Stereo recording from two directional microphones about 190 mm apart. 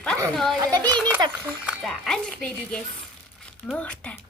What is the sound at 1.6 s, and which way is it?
Speech, centre (ahead or behind).